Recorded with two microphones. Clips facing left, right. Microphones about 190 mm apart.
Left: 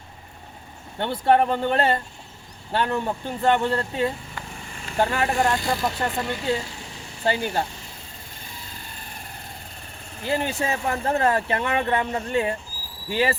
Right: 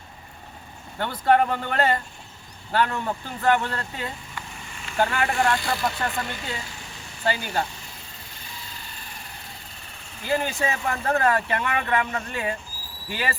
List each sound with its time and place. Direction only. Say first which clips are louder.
0.9 s speech: left 1 dB; 25° left (ahead or behind)
5.6 s speech: left 2 dB; 20° left (ahead or behind)
7.3 s speech: left 2 dB; 25° left (ahead or behind)
10.2 s speech: even; 25° left (ahead or behind)